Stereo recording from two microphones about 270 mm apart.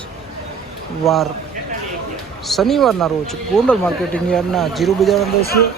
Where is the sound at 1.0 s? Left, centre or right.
Centre.